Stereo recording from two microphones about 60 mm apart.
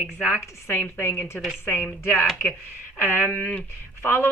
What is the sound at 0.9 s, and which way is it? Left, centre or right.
Speech, left.